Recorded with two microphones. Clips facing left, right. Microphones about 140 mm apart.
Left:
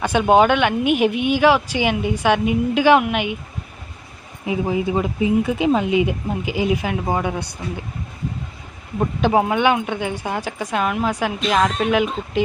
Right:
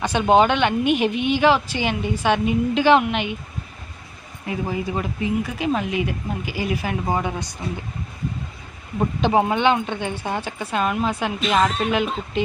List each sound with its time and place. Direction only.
0.0 s speech: 10° left (ahead or behind)
4.4 s speech: 15° left (ahead or behind)
9.0 s speech: 5° left (ahead or behind)